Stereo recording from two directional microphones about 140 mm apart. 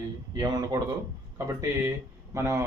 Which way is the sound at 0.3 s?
30° right (ahead or behind).